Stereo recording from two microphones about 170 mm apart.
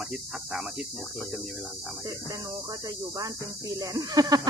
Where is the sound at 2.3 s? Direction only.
20° right (ahead or behind).